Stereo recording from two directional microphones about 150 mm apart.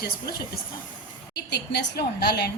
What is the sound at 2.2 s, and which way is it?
Speech, 90° left.